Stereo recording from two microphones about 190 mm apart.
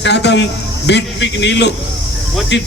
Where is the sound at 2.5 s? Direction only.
65° left (ahead or behind).